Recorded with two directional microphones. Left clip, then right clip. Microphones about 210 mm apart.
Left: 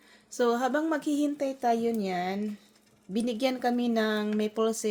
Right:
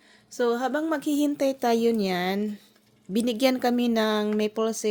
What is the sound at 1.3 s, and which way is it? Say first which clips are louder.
Speech: right 4 dB; 40° right (ahead or behind).